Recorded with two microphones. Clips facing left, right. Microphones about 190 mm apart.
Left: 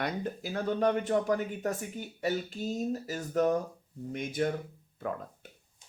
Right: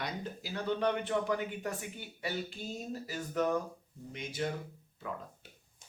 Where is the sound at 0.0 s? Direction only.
50° left (ahead or behind).